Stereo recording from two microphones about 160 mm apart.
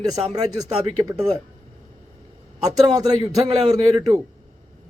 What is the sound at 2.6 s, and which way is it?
Speech, 25° right (ahead or behind).